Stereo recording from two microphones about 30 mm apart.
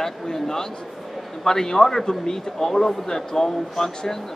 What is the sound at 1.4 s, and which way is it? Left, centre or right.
Speech, centre.